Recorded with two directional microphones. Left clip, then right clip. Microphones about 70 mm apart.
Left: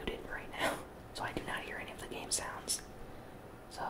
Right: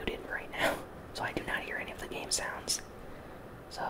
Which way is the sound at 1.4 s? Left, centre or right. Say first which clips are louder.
Right 5 dB; centre.